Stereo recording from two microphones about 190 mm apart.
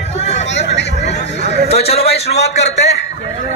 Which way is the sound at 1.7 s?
30° left (ahead or behind).